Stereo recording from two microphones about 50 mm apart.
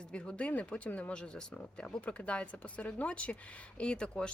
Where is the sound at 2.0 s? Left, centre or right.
Left.